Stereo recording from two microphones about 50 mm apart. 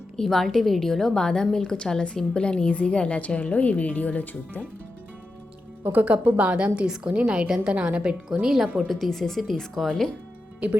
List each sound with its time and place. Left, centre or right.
0.2 s a woman's voice: centre; by 4.6 s left
5.8 s a woman's voice: right
6.7 s a woman's voice: centre
8.4 s a woman's voice: centre